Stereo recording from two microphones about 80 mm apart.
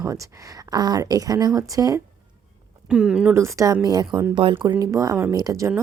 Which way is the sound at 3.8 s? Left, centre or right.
Right.